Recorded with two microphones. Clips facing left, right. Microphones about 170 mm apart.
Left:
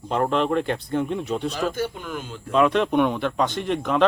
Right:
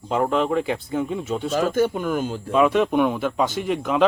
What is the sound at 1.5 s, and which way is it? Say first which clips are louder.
Speech: right 5 dB; 45° right (ahead or behind).